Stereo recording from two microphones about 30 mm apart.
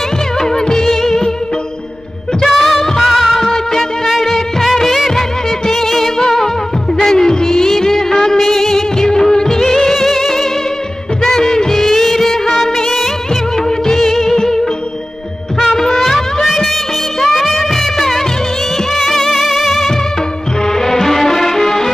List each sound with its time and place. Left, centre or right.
0.4 s music: centre
2.4 s music of bollywood: centre
5.7 s music: centre
6.1 s music: centre
7.1 s music of bollywood: centre
9.9 s music: centre
11.2 s music of bollywood: centre
13.7 s music: centre
17.2 s music: centre
19.3 s music: centre
20.8 s music: centre